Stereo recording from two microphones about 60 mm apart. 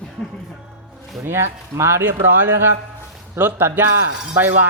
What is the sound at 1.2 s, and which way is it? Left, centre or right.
Speech, right.